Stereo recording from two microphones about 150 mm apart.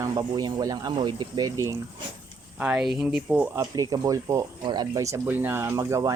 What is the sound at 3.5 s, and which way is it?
Speech, 25° right (ahead or behind).